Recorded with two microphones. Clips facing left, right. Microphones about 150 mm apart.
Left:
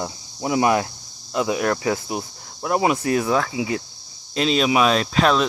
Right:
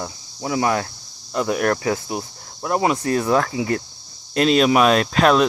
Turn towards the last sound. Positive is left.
turn(degrees=0)  # may be behind; listen again after turning